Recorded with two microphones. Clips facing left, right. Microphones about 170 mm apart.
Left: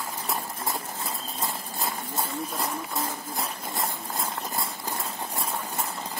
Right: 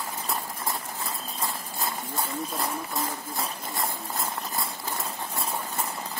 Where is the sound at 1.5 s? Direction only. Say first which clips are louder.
Left 1 dB; centre (ahead or behind).